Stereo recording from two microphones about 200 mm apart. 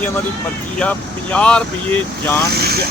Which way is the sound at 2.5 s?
50° right (ahead or behind).